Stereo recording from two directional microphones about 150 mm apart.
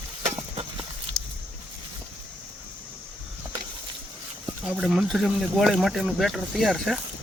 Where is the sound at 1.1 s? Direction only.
5° left (ahead or behind).